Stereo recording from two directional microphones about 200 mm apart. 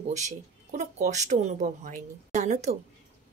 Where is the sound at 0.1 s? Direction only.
35° right (ahead or behind).